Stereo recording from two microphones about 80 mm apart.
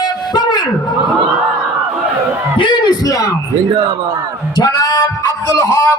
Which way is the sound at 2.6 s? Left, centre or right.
Left.